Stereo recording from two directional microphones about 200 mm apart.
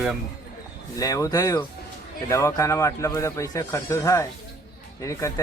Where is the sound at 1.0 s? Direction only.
15° left (ahead or behind).